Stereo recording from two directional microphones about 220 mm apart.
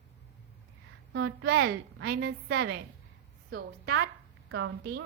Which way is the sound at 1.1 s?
55° right (ahead or behind).